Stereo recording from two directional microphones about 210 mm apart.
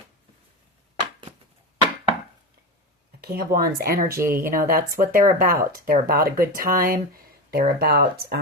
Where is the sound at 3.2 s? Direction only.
45° right (ahead or behind).